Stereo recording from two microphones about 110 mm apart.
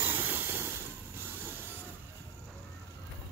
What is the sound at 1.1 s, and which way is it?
Vehicle, 20° right (ahead or behind).